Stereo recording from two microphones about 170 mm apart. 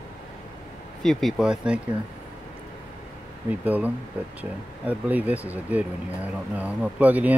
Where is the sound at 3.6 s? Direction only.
10° right (ahead or behind).